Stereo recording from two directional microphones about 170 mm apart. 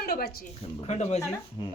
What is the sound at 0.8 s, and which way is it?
Speech, 40° left (ahead or behind).